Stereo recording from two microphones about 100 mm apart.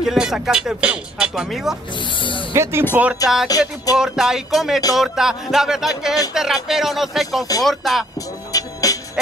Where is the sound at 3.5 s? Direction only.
35° left (ahead or behind).